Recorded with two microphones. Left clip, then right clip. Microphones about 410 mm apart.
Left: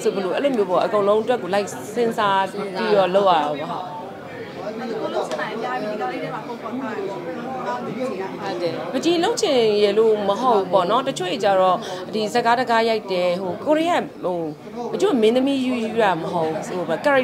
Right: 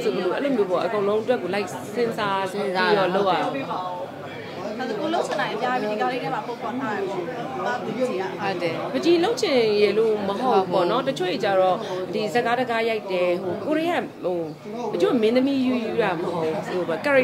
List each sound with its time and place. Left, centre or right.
0.4 s a woman's voice: centre
8.9 s a woman's voice: centre